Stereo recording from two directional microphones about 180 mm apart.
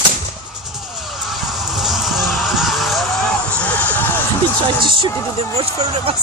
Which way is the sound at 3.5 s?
10° left (ahead or behind).